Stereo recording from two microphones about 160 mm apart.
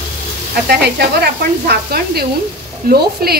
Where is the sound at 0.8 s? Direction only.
90° right.